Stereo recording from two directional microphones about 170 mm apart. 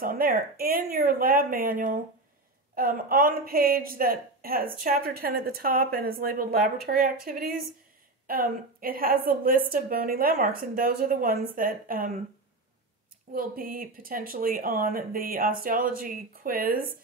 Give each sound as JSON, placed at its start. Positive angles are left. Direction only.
{"t": 0.0, "sound": "a woman's voice", "side_deg": -60}
{"t": 13.3, "sound": "a woman's voice", "side_deg": -55}